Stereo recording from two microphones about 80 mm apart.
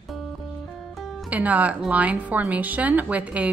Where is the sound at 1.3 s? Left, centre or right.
Centre.